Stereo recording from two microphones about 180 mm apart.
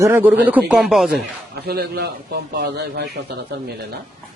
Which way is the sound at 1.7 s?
60° right (ahead or behind).